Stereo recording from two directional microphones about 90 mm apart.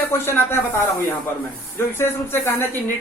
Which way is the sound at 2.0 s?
25° left (ahead or behind).